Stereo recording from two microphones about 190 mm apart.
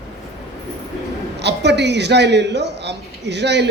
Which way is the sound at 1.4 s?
65° right (ahead or behind).